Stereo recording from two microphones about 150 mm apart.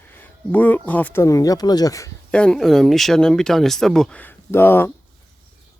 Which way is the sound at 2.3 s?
5° left (ahead or behind).